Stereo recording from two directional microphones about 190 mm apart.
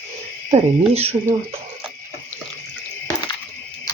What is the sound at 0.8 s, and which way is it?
Speech, 30° right (ahead or behind).